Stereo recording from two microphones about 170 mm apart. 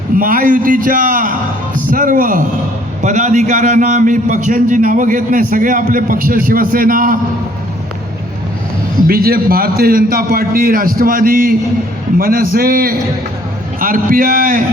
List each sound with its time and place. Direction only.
0.2 s a man's voice: 55° right (ahead or behind)
9.0 s a man's voice: 60° right (ahead or behind)